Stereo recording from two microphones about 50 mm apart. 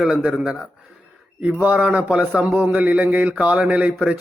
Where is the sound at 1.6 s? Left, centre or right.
Right.